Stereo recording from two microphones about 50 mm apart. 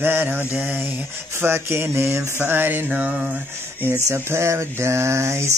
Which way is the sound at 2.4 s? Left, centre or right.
Right.